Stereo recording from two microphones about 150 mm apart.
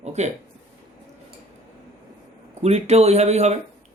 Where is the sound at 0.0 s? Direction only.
50° right (ahead or behind).